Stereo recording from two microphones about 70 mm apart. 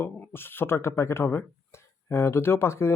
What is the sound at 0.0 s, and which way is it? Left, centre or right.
Speech, left.